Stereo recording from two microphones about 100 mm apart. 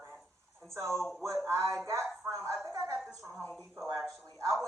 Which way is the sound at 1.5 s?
30° right (ahead or behind).